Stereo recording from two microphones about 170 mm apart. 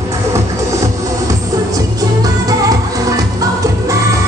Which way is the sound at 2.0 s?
20° right (ahead or behind).